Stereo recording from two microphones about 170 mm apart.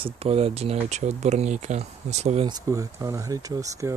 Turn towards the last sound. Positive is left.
turn(degrees=-20)  # may be behind; listen again after turning